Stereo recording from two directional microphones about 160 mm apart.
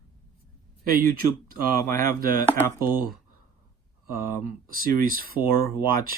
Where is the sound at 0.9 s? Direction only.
65° right (ahead or behind).